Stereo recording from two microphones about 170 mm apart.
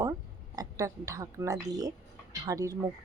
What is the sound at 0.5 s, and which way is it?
A woman's voice, 20° right (ahead or behind).